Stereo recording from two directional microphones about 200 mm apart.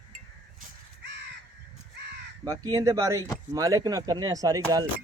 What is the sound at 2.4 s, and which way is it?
Speech, 15° right (ahead or behind).